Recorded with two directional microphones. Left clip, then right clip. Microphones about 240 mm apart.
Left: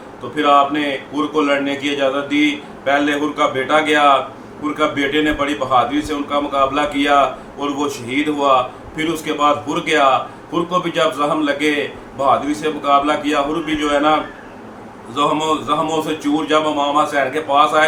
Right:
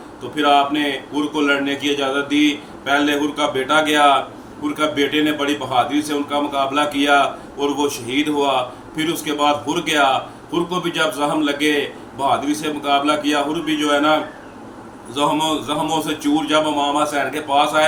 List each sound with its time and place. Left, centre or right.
0.3 s speech: centre